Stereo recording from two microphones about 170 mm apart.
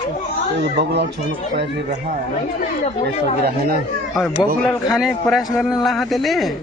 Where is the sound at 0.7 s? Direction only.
75° right (ahead or behind).